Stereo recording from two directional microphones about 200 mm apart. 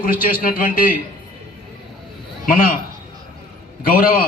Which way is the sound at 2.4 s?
45° left (ahead or behind).